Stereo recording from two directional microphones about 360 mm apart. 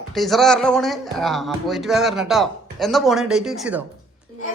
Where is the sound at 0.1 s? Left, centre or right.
Centre.